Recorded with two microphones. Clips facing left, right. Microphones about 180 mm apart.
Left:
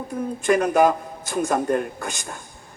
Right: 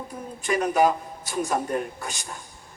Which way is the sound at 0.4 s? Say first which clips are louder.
Left 4 dB; 50° left (ahead or behind).